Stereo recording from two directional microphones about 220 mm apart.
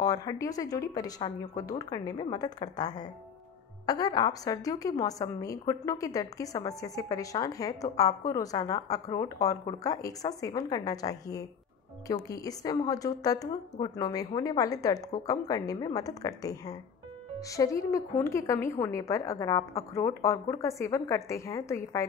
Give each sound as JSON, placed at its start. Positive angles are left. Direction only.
{"t": 0.0, "sound": "a woman's voice", "side_deg": 15}